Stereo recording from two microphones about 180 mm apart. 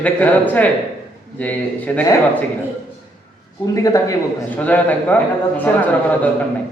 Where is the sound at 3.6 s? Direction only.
20° left (ahead or behind).